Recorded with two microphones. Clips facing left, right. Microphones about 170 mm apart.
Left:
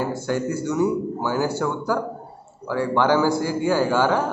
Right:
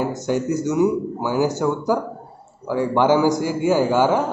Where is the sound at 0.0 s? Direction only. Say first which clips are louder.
Right 2 dB; 20° right (ahead or behind).